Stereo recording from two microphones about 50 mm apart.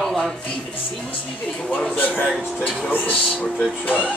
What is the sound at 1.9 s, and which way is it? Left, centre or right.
Speech, left.